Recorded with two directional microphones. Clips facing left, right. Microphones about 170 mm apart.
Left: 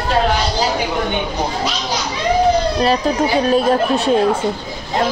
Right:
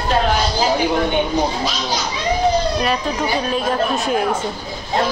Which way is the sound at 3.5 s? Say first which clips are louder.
Left 5 dB; 30° left (ahead or behind).